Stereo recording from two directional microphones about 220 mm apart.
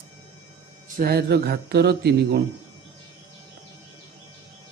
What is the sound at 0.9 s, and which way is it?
Speech, 45° right (ahead or behind).